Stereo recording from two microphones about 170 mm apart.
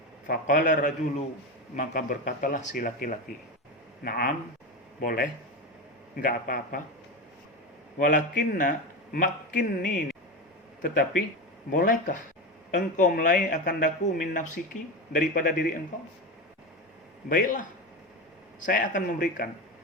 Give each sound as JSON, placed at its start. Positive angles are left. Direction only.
{"t": 0.3, "sound": "a man's voice", "side_deg": 50}
{"t": 4.0, "sound": "a man's voice", "side_deg": 65}
{"t": 7.9, "sound": "a man's voice", "side_deg": 50}
{"t": 11.7, "sound": "a man's voice", "side_deg": 50}
{"t": 17.2, "sound": "a man's voice", "side_deg": 50}